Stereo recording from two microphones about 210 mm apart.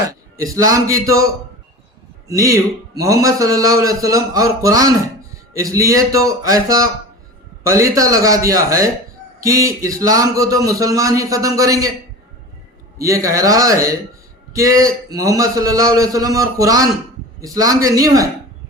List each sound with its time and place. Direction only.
0.4 s a man's voice: 15° right (ahead or behind)
13.0 s a man's voice: 15° right (ahead or behind)